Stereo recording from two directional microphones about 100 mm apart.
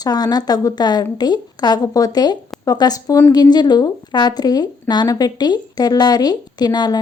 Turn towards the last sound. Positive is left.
turn(degrees=45)  # may be behind; listen again after turning